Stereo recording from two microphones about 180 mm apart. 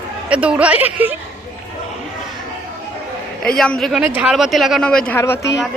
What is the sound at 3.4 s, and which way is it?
Speech, 5° left (ahead or behind).